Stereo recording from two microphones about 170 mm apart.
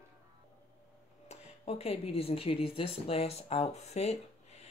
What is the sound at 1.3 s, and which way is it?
A woman's voice, 40° left (ahead or behind).